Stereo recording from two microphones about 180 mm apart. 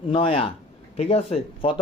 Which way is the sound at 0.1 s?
30° left (ahead or behind).